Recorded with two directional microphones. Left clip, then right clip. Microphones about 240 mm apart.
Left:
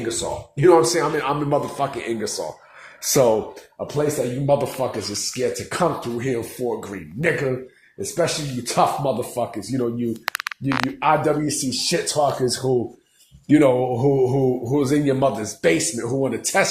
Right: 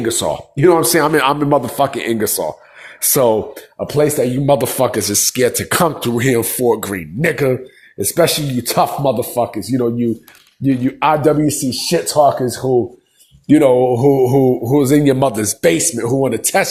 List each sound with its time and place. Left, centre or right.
0.2 s speech: right
11.7 s speech: right